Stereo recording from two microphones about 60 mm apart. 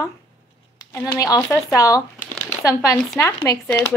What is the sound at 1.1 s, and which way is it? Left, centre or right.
Speech, left.